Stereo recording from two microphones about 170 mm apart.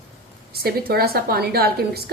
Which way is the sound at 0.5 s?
65° right (ahead or behind).